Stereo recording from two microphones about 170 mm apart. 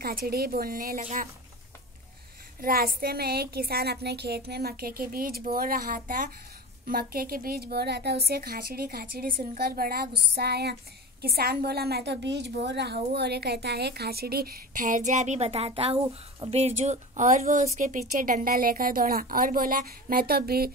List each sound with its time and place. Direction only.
0.0 s a woman's voice: 65° right (ahead or behind)
2.6 s a woman's voice: 60° right (ahead or behind)